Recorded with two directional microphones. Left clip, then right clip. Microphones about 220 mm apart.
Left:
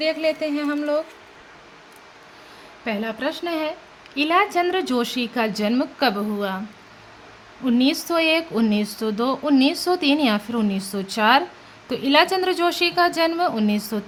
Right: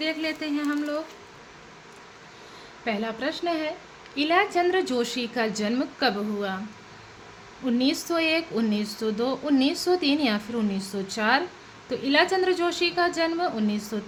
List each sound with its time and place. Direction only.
0.0 s speech: 20° left (ahead or behind)
2.8 s speech: 25° left (ahead or behind)
7.6 s a woman's voice: 25° left (ahead or behind)